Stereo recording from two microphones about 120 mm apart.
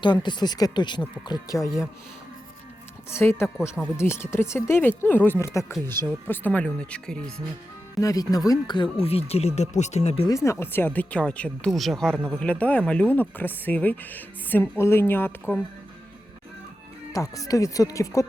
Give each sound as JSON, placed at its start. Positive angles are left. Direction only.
{"t": 0.0, "sound": "speech", "side_deg": 40}
{"t": 3.1, "sound": "speech", "side_deg": 20}
{"t": 7.9, "sound": "speech", "side_deg": 30}
{"t": 10.2, "sound": "speech", "side_deg": 25}
{"t": 17.1, "sound": "speech", "side_deg": 30}